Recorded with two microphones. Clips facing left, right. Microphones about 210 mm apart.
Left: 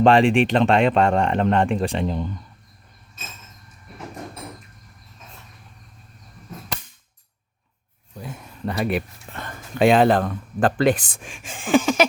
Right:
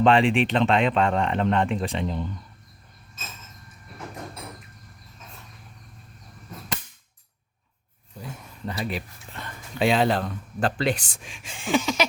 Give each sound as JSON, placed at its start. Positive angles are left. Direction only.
{"t": 0.0, "sound": "speech", "side_deg": 45}
{"t": 8.6, "sound": "speech", "side_deg": 60}